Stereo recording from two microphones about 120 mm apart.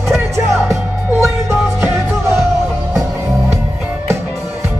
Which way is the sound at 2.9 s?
25° right (ahead or behind).